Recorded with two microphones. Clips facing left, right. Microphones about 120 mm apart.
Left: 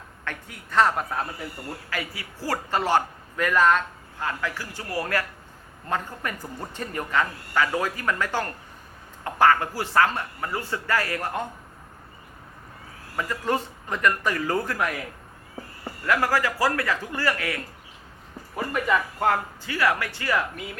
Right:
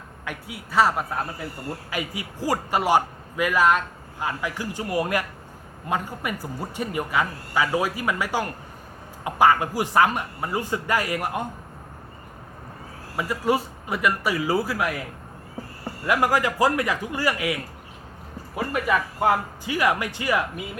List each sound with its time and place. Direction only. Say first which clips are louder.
0.3 s a man's voice: right 2 dB; 10° right (ahead or behind)
1.9 s a man's voice: right 2 dB; 15° right (ahead or behind)
13.1 s a man's voice: right 3 dB; 10° right (ahead or behind)
16.0 s a man's voice: right 2 dB; 15° right (ahead or behind)